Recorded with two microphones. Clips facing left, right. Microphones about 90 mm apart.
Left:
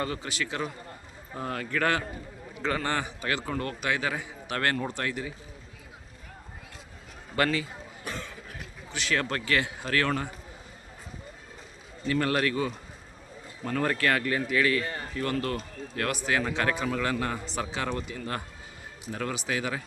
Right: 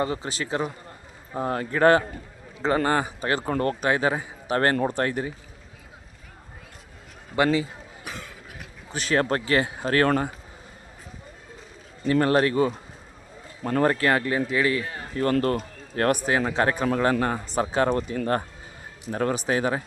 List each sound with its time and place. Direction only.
0.0 s a man's voice: 30° right (ahead or behind)
7.3 s speech: 20° right (ahead or behind)
8.0 s cough: 5° right (ahead or behind)
8.9 s a man's voice: 40° right (ahead or behind)
12.2 s a man's voice: 30° right (ahead or behind)
14.8 s speech: 5° right (ahead or behind)
15.1 s a man's voice: 40° right (ahead or behind)